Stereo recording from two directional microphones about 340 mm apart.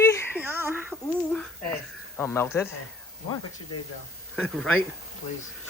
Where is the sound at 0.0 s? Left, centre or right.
Centre.